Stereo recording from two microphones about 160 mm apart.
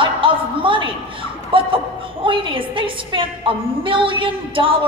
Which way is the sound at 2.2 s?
35° right (ahead or behind).